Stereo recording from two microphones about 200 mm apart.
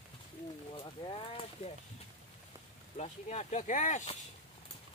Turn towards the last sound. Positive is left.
turn(degrees=35)  # may be behind; listen again after turning